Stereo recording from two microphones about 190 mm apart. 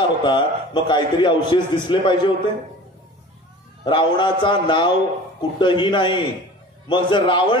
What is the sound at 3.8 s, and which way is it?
A man's voice, 25° left (ahead or behind).